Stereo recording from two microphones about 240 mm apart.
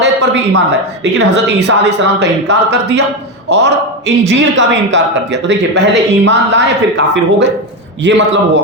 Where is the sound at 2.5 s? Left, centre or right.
Right.